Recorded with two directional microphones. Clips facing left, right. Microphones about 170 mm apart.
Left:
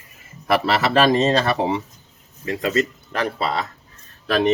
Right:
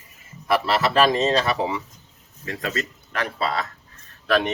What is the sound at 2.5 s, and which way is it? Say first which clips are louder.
Speech: left 7 dB; 30° left (ahead or behind).